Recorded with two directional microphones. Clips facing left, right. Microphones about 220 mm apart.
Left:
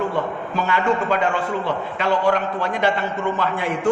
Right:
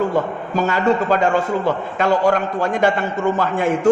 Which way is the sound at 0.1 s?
40° right (ahead or behind).